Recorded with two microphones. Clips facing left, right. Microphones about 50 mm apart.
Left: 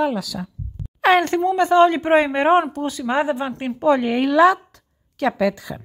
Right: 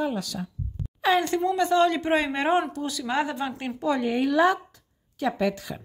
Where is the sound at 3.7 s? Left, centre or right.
Left.